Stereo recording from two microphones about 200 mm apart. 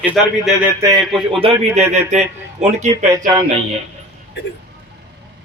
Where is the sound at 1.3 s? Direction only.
30° right (ahead or behind).